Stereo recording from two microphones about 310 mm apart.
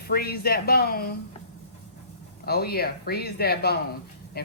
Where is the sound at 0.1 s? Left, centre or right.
Left.